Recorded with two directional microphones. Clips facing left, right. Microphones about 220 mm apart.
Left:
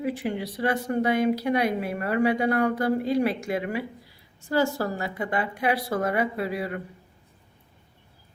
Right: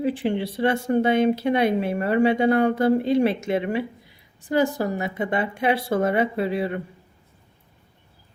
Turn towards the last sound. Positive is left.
turn(degrees=-25)  # may be behind; listen again after turning